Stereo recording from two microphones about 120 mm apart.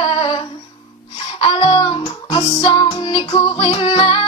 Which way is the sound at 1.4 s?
40° left (ahead or behind).